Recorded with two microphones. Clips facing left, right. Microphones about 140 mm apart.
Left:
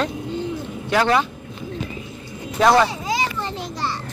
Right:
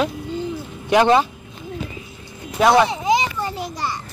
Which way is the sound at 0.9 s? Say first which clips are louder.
Right 4 dB; 20° right (ahead or behind).